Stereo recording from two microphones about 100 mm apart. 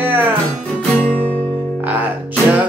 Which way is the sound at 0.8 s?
15° left (ahead or behind).